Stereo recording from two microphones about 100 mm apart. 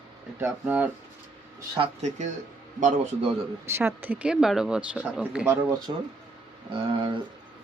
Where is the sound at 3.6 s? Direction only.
25° right (ahead or behind).